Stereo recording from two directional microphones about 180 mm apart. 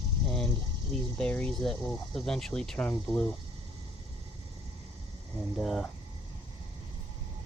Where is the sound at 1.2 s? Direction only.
5° left (ahead or behind).